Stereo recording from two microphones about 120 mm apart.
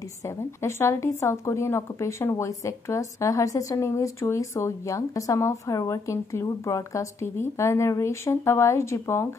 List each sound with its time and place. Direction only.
0.2 s a woman's voice: 20° left (ahead or behind)